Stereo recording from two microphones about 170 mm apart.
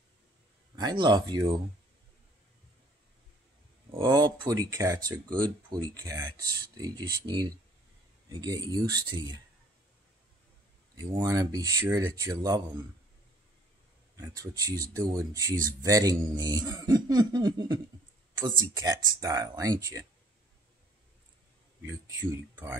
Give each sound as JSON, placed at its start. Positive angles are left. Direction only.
{"t": 0.7, "sound": "speech", "side_deg": -25}
{"t": 3.9, "sound": "speech", "side_deg": -25}
{"t": 11.0, "sound": "speech", "side_deg": -25}
{"t": 14.1, "sound": "speech", "side_deg": -20}